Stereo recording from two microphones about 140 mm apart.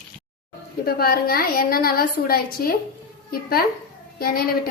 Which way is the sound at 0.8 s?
90° left.